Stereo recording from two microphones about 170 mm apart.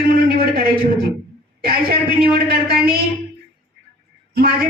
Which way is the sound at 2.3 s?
70° right (ahead or behind).